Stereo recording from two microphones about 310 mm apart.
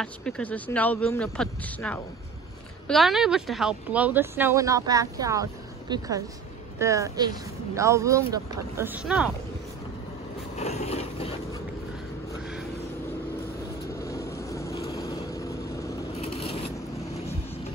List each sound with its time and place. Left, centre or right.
0.0 s speech: centre
10.5 s vehicle: left
14.0 s vehicle: centre
16.2 s scissors: centre